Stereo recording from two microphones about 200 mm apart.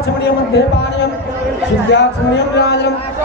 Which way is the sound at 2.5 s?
55° left (ahead or behind).